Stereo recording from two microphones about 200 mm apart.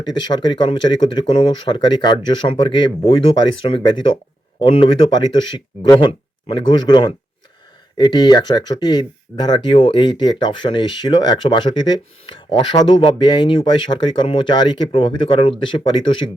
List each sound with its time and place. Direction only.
0.0 s speech: 20° left (ahead or behind)